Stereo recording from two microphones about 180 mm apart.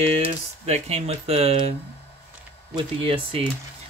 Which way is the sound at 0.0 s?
35° right (ahead or behind).